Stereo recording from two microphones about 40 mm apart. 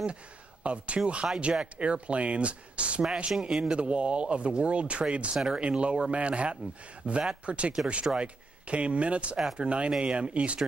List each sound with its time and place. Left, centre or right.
0.7 s speech: right
3.4 s speech: right